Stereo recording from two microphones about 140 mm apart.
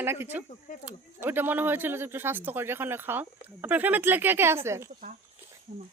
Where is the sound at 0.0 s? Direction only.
15° right (ahead or behind).